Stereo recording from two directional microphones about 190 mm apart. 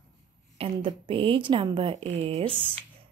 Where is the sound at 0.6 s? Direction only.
25° right (ahead or behind).